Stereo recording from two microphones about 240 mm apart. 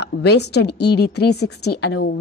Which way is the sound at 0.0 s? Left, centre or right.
Left.